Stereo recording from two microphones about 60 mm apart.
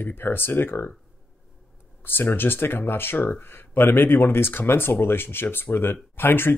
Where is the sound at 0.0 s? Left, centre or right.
Left.